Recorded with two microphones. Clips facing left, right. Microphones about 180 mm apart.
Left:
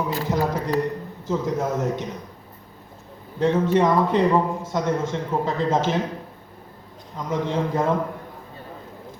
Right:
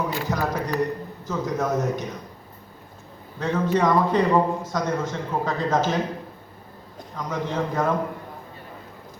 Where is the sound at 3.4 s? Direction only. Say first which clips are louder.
Left 3 dB; 25° left (ahead or behind).